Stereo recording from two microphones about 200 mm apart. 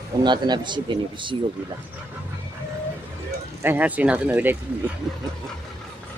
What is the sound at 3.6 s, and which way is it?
Speech, 10° right (ahead or behind).